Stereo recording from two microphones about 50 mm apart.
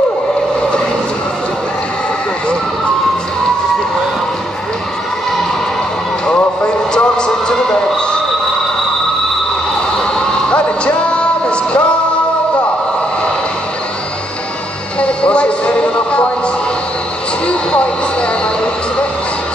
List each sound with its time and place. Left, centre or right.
6.2 s music: centre
10.5 s music: left
15.0 s music: left